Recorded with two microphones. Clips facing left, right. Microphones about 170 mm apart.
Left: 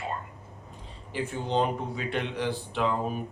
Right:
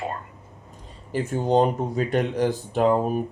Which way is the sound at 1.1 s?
45° right (ahead or behind).